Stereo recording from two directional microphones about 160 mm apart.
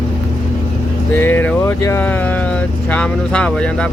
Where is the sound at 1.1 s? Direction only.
15° left (ahead or behind).